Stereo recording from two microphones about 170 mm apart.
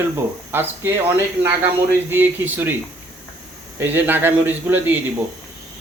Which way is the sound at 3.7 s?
10° right (ahead or behind).